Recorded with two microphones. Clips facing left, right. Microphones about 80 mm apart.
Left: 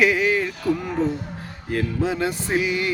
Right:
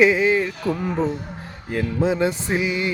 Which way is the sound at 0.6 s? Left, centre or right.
Right.